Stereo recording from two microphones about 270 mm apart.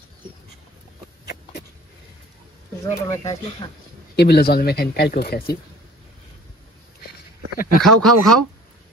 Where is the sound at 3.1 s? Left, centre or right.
Centre.